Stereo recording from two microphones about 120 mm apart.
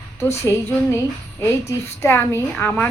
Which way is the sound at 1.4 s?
20° left (ahead or behind).